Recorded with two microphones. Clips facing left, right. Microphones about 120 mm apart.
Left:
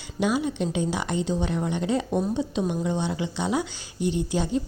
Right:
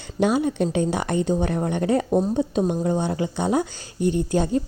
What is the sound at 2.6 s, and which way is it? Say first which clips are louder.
Speech: right 4 dB; 40° right (ahead or behind).